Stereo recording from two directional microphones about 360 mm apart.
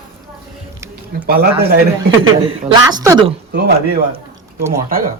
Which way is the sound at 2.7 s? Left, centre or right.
Centre.